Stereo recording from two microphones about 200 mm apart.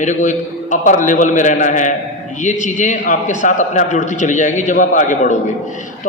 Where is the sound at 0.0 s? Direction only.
40° left (ahead or behind).